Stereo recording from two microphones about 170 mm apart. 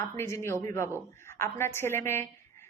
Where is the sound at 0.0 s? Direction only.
15° left (ahead or behind).